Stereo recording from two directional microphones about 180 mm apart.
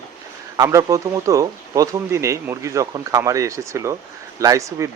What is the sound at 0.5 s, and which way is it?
Speech, 20° right (ahead or behind).